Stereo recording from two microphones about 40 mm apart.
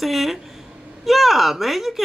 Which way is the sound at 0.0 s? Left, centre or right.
Centre.